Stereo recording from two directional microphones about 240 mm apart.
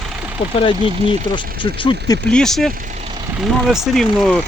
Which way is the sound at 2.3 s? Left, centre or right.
Centre.